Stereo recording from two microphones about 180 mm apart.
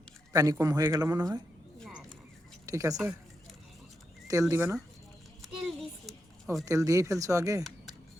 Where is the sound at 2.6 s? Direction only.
20° right (ahead or behind).